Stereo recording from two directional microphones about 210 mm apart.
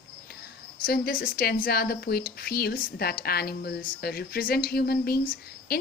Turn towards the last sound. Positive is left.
turn(degrees=45)  # may be behind; listen again after turning